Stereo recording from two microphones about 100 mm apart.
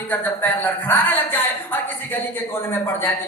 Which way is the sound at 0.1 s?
20° left (ahead or behind).